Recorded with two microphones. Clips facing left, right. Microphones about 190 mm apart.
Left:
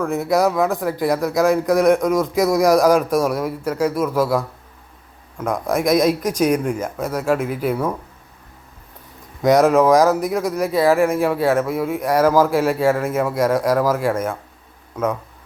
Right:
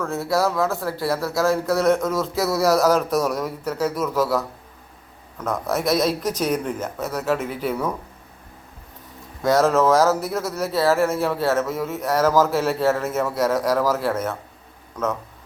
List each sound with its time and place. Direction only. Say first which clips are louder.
0.0 s speech: left 4 dB; 15° left (ahead or behind)
9.4 s speech: left 4 dB; 15° left (ahead or behind)